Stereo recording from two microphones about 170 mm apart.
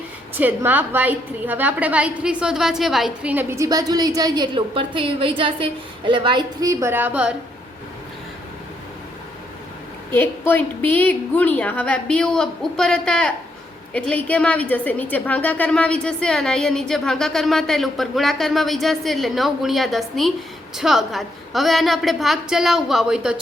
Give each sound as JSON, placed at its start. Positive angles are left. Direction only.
{"t": 0.3, "sound": "a woman's voice", "side_deg": -10}
{"t": 10.1, "sound": "a woman's voice", "side_deg": 15}